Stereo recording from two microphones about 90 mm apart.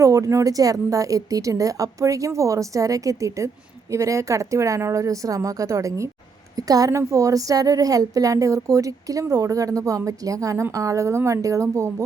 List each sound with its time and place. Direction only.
0.0 s a woman's voice: 35° right (ahead or behind)